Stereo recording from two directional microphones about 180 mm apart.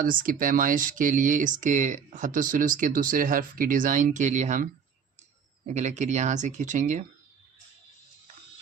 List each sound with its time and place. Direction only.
0.0 s speech: 50° right (ahead or behind)